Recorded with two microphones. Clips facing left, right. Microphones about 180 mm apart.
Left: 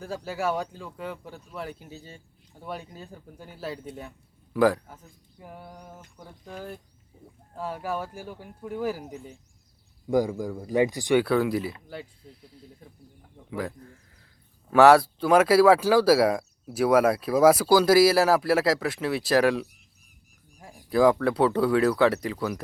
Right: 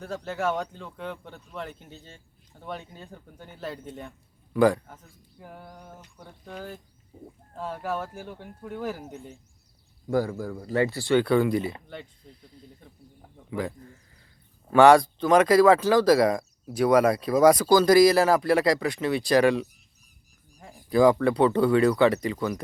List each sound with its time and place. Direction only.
0.0 s speech: 10° left (ahead or behind)
10.1 s speech: 15° left (ahead or behind)
11.3 s speech: 5° left (ahead or behind)